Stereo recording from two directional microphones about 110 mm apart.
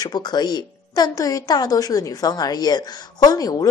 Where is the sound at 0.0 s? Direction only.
40° left (ahead or behind).